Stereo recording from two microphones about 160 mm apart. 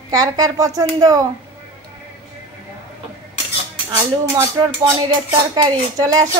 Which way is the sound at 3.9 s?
25° right (ahead or behind).